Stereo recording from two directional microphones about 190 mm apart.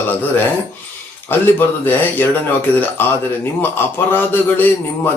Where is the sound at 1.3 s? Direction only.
10° left (ahead or behind).